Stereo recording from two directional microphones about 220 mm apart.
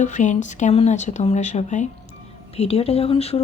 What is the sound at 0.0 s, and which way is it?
Speech, 35° left (ahead or behind).